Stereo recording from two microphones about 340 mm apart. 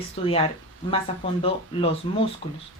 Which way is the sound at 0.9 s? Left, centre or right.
Centre.